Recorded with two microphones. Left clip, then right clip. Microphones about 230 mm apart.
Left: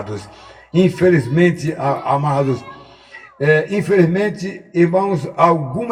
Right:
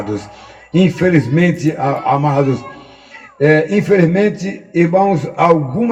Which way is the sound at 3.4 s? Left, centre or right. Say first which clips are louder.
Right 3 dB; left.